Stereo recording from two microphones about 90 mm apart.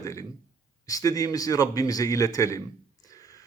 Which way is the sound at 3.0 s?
40° left (ahead or behind).